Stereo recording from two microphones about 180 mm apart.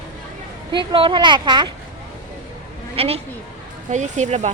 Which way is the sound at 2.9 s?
35° right (ahead or behind).